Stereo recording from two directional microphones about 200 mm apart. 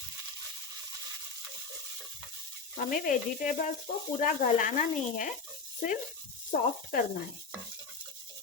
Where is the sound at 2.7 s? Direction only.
40° left (ahead or behind).